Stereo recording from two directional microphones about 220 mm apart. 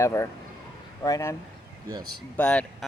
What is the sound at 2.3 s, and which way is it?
Speech, 5° left (ahead or behind).